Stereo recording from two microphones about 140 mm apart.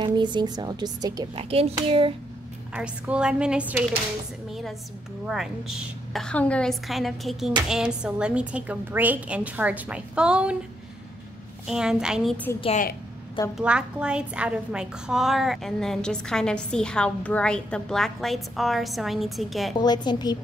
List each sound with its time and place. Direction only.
0.0 s a woman's voice: 35° right (ahead or behind)
1.3 s hands: 45° right (ahead or behind)
2.7 s a woman's voice: 10° right (ahead or behind)
11.6 s a woman's voice: 5° right (ahead or behind)
13.6 s a woman's voice: 5° right (ahead or behind)
19.8 s a woman's voice: 30° left (ahead or behind)